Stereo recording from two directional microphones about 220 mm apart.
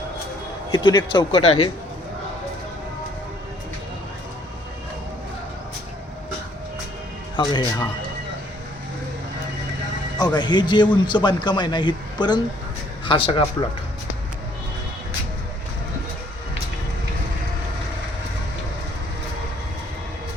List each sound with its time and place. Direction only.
0.7 s a man's voice: 20° left (ahead or behind)
7.3 s a man's voice: 20° left (ahead or behind)
10.2 s a man's voice: 20° left (ahead or behind)